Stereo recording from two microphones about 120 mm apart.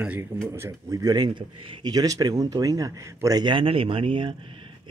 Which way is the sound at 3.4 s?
45° right (ahead or behind).